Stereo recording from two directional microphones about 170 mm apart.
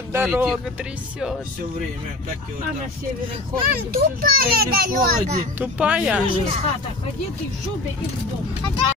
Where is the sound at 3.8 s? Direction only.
60° right (ahead or behind).